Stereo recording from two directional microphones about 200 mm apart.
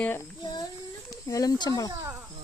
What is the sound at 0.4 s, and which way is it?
Child singing, 20° left (ahead or behind).